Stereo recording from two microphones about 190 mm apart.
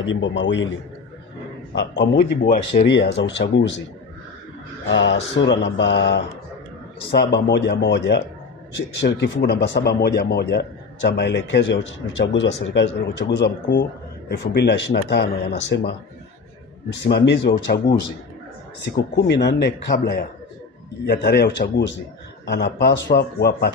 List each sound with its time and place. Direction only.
0.0 s mantra: 75° left (ahead or behind)
1.8 s speech: 65° left (ahead or behind)
3.2 s mantra: 65° left (ahead or behind)
4.8 s mantra: 70° left (ahead or behind)
7.1 s speech: 60° left (ahead or behind)
14.4 s speech: 60° left (ahead or behind)